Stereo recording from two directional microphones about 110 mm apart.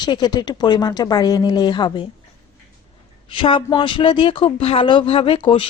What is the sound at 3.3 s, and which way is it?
Speech, 50° left (ahead or behind).